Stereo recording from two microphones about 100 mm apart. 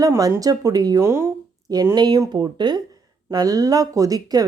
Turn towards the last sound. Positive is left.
turn(degrees=-40)  # may be behind; listen again after turning